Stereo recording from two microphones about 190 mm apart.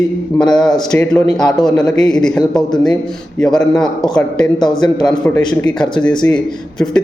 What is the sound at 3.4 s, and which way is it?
Speech, 5° left (ahead or behind).